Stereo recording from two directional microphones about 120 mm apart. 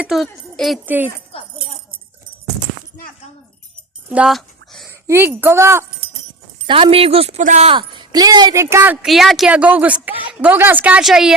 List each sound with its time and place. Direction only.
0.0 s speech: centre (ahead or behind)
0.9 s a woman's voice: 15° right (ahead or behind)
1.3 s a sound: 50° left (ahead or behind)
4.1 s a sound: 5° right (ahead or behind)
4.9 s a woman's voice: 20° right (ahead or behind)
6.9 s speech: 55° right (ahead or behind); by 7.7 s 75° right (ahead or behind)
7.7 s a woman's voice: 40° right (ahead or behind)
8.5 s a woman's voice: 20° right (ahead or behind)
9.0 s a woman's voice: centre (ahead or behind)